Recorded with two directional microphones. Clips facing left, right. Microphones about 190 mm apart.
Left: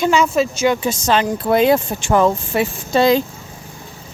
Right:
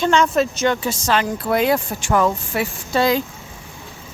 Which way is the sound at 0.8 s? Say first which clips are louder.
Left 3 dB; 20° left (ahead or behind).